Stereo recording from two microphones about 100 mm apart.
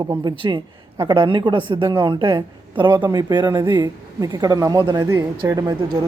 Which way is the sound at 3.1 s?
45° right (ahead or behind).